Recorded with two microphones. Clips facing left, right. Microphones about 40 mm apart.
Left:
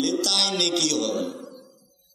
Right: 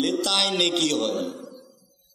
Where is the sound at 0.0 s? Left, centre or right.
Right.